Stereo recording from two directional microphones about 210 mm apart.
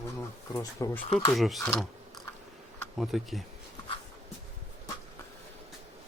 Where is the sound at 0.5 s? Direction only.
15° left (ahead or behind).